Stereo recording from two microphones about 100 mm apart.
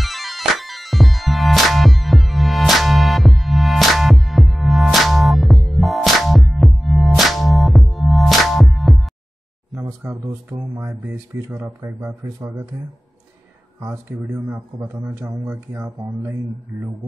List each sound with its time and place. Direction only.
0.0 s music: centre (ahead or behind)
11.1 s speech: 30° right (ahead or behind)
13.8 s speech: 35° right (ahead or behind)